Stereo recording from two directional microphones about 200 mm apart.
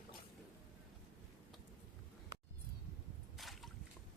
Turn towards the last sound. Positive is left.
turn(degrees=0)  # may be behind; listen again after turning